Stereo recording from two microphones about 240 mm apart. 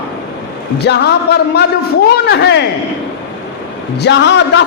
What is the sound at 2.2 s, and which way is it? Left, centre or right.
Speech, left.